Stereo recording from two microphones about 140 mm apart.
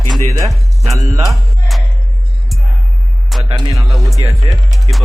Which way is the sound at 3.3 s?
Centre (ahead or behind).